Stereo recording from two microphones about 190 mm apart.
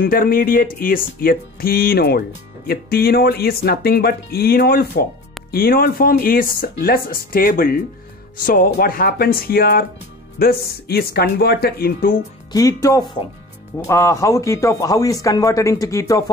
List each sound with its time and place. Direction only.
0.0 s speech: 50° left (ahead or behind)
12.5 s a man's voice: 15° left (ahead or behind)